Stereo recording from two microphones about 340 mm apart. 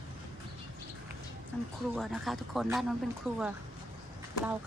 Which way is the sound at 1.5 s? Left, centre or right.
Centre.